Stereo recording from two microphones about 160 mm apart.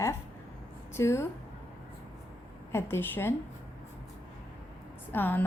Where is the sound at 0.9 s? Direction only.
15° left (ahead or behind).